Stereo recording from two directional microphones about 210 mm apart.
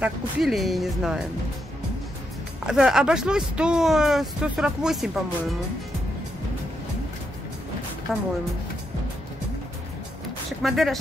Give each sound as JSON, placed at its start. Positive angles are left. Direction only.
{"t": 0.0, "sound": "speech", "side_deg": 0}
{"t": 2.6, "sound": "speech", "side_deg": -5}
{"t": 8.1, "sound": "speech", "side_deg": 0}
{"t": 10.6, "sound": "speech", "side_deg": 0}